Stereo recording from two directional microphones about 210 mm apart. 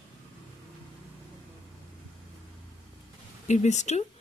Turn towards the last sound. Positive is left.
turn(degrees=35)  # may be behind; listen again after turning